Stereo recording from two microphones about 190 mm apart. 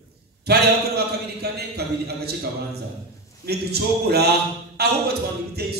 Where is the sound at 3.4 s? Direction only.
55° right (ahead or behind).